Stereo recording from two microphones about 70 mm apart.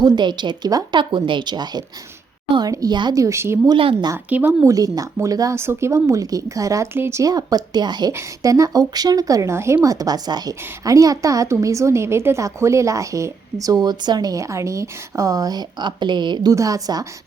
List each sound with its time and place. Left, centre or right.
0.0 s speech: right
2.6 s a woman's voice: right
3.2 s speech: right
4.3 s a woman's voice: right
4.6 s a woman's voice: right
5.5 s a woman's voice: right
6.9 s speech: right
7.2 s speech: right
8.4 s a woman's voice: right
9.5 s speech: right
9.8 s a woman's voice: right
16.6 s a woman's voice: right